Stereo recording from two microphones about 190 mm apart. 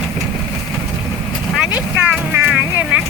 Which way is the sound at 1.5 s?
5° right (ahead or behind).